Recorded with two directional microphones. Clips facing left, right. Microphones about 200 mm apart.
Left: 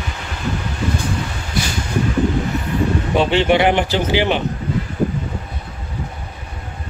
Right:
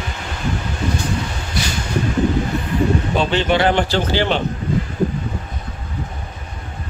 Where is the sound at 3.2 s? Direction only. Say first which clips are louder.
Left 3 dB; 20° left (ahead or behind).